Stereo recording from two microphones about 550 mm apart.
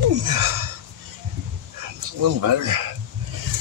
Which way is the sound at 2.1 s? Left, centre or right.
Right.